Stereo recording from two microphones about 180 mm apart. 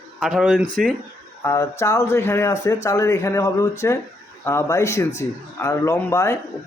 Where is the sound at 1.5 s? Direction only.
15° left (ahead or behind).